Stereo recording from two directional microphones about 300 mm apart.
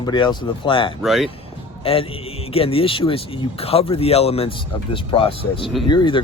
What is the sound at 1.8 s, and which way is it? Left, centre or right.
A man's voice, centre.